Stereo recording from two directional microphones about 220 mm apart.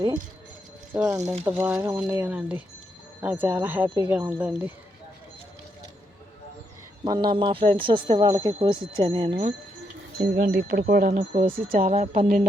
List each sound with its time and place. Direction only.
1.1 s speech: 15° right (ahead or behind)
7.0 s speech: 20° right (ahead or behind)
10.3 s speech: 45° right (ahead or behind)